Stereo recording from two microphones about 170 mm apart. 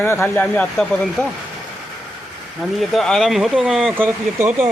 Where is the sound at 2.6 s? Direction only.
Centre (ahead or behind).